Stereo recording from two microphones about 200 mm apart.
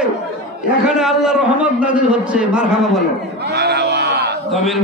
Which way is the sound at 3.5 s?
55° right (ahead or behind).